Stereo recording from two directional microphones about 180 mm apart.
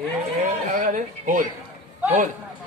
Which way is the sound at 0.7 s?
45° right (ahead or behind).